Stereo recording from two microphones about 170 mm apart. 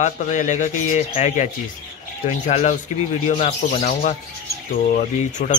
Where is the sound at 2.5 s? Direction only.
40° left (ahead or behind).